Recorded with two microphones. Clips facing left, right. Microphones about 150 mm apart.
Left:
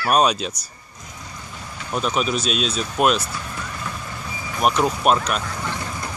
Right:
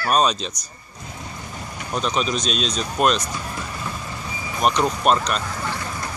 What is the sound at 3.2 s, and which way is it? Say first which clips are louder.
Vehicle: right 1 dB; 15° right (ahead or behind).